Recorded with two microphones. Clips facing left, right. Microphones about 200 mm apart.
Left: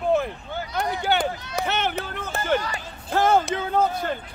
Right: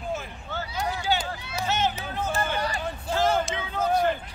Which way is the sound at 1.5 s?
60° left (ahead or behind).